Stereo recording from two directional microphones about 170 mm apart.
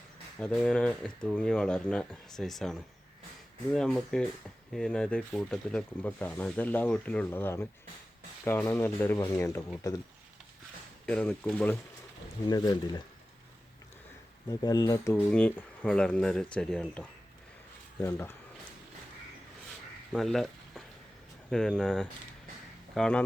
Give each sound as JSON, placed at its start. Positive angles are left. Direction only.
{"t": 0.3, "sound": "speech", "side_deg": 5}
{"t": 11.0, "sound": "speech", "side_deg": 5}
{"t": 12.5, "sound": "speech", "side_deg": 25}
{"t": 14.4, "sound": "speech", "side_deg": 20}
{"t": 20.1, "sound": "speech", "side_deg": 0}